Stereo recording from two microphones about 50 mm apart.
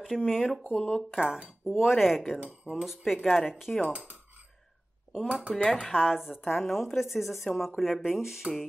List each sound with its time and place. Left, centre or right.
0.0 s speech: centre
0.8 s speech: centre
5.1 s speech: centre
5.5 s speech: centre
5.9 s speech: centre
6.5 s speech: centre
8.5 s speech: centre